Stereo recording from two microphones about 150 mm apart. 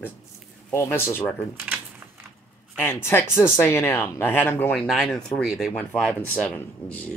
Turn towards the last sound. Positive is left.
turn(degrees=10)  # may be behind; listen again after turning